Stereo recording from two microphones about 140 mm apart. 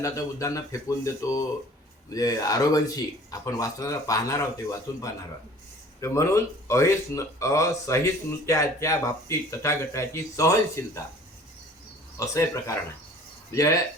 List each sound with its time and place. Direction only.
0.0 s speech: 25° left (ahead or behind)
12.1 s speech: 25° left (ahead or behind)